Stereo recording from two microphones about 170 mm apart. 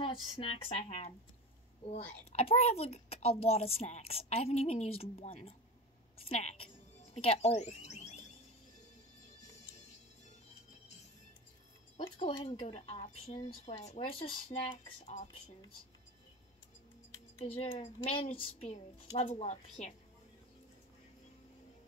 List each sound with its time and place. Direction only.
0.0 s speech: 30° left (ahead or behind)
12.5 s speech: 40° left (ahead or behind)
17.5 s speech: 40° left (ahead or behind)